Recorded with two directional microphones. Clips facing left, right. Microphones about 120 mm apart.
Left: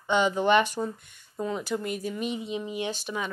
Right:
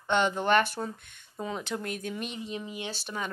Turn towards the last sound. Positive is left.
turn(degrees=10)  # may be behind; listen again after turning